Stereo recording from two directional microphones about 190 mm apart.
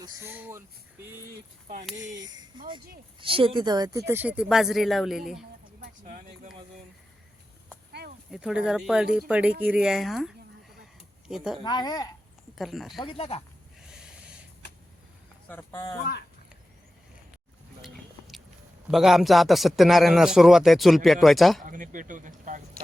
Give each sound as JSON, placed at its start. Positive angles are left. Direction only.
{"t": 0.0, "sound": "speech", "side_deg": -15}
{"t": 1.6, "sound": "speech", "side_deg": -45}
{"t": 2.0, "sound": "speech", "side_deg": -20}
{"t": 5.8, "sound": "speech", "side_deg": -40}
{"t": 8.3, "sound": "a man's voice", "side_deg": -5}
{"t": 11.6, "sound": "a woman's voice", "side_deg": 20}
{"t": 12.5, "sound": "a man's voice", "side_deg": 0}
{"t": 13.0, "sound": "a woman's voice", "side_deg": 30}
{"t": 13.8, "sound": "a sound", "side_deg": -5}
{"t": 15.4, "sound": "speech", "side_deg": 10}
{"t": 17.8, "sound": "a sound", "side_deg": 0}
{"t": 18.9, "sound": "a man's voice", "side_deg": 0}
{"t": 21.6, "sound": "speech", "side_deg": -45}